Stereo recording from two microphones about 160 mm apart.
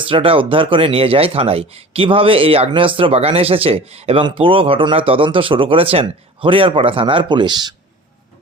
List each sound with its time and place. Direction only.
0.1 s speech: 35° right (ahead or behind)